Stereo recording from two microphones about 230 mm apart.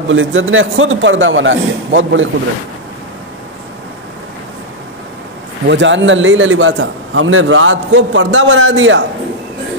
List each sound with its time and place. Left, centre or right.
0.1 s a man's voice: right
5.7 s a man's voice: right